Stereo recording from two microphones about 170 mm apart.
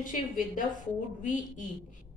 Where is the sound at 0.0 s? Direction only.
50° left (ahead or behind).